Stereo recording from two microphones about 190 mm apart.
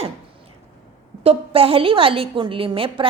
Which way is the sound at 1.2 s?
30° right (ahead or behind).